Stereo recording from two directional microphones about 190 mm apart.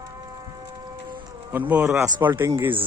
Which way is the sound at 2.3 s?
15° right (ahead or behind).